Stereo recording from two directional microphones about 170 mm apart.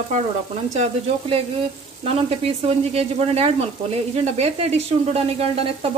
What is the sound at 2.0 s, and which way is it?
Speech, 35° right (ahead or behind).